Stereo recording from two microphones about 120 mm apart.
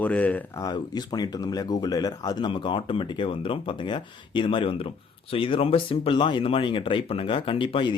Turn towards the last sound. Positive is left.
turn(degrees=40)  # may be behind; listen again after turning